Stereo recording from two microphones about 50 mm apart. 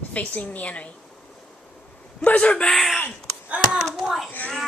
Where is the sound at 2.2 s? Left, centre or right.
Left.